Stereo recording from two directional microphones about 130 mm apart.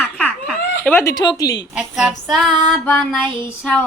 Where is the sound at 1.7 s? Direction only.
5° right (ahead or behind).